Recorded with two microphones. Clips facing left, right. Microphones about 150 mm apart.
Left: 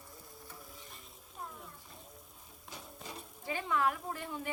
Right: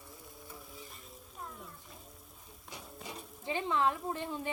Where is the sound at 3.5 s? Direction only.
25° right (ahead or behind).